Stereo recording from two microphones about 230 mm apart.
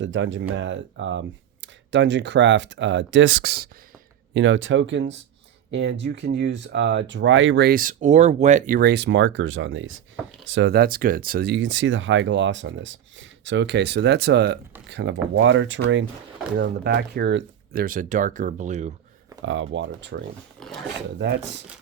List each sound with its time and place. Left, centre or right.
0.0 s speech: right
4.4 s speech: right
16.6 s speech: right
19.4 s speech: right
20.6 s speech: centre
21.2 s speech: right